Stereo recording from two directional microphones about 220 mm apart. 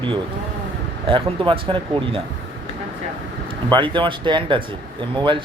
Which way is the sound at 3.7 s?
20° right (ahead or behind).